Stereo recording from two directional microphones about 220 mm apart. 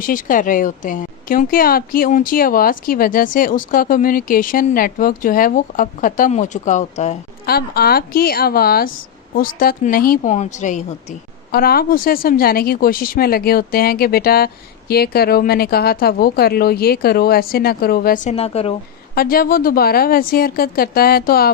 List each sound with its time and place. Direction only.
0.0 s speech: 40° left (ahead or behind)
7.4 s speech: 45° left (ahead or behind); by 18.8 s 25° left (ahead or behind)
19.1 s speech: 45° left (ahead or behind)